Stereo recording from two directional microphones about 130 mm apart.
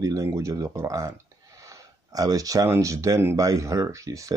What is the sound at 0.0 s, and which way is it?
Speech, 25° right (ahead or behind).